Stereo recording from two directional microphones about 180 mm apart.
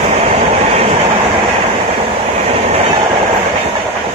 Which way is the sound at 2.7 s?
30° right (ahead or behind).